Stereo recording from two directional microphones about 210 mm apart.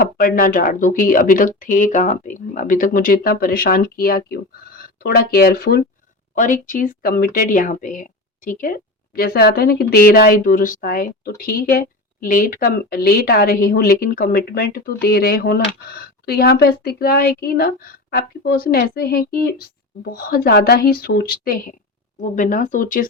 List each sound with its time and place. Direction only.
0.0 s a woman's voice: 40° left (ahead or behind)